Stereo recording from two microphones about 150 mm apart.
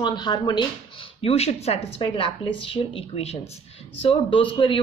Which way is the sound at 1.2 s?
45° left (ahead or behind).